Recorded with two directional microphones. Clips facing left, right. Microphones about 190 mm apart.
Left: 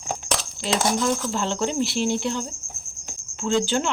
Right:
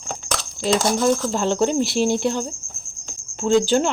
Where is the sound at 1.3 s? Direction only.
40° right (ahead or behind).